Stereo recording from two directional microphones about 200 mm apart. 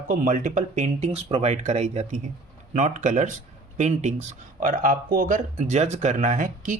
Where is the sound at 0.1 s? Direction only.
40° right (ahead or behind).